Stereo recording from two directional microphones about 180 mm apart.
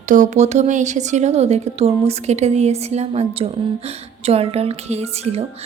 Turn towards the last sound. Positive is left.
turn(degrees=-35)  # may be behind; listen again after turning